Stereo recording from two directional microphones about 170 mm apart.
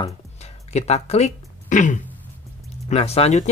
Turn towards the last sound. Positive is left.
turn(degrees=40)  # may be behind; listen again after turning